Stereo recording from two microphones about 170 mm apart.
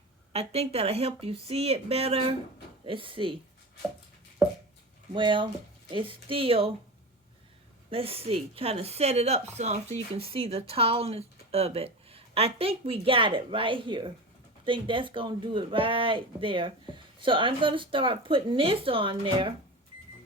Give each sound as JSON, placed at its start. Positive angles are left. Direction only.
{"t": 0.3, "sound": "a woman's voice", "side_deg": -35}
{"t": 5.1, "sound": "a woman's voice", "side_deg": -30}
{"t": 7.9, "sound": "a woman's voice", "side_deg": -35}